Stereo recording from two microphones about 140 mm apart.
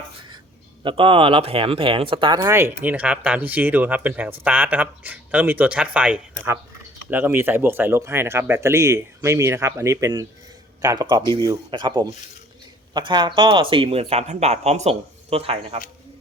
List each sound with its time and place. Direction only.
0.9 s speech: 40° right (ahead or behind)
2.5 s speech: 15° right (ahead or behind); by 15.8 s 45° right (ahead or behind)